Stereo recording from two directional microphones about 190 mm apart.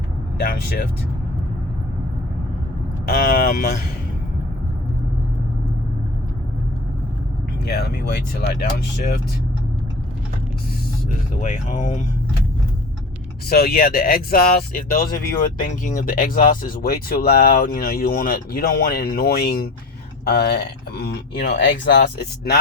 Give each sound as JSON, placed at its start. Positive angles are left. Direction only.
{"t": 0.3, "sound": "speech", "side_deg": 55}
{"t": 3.1, "sound": "speech", "side_deg": 50}
{"t": 7.6, "sound": "speech", "side_deg": 55}
{"t": 11.3, "sound": "speech", "side_deg": 40}
{"t": 13.5, "sound": "speech", "side_deg": 55}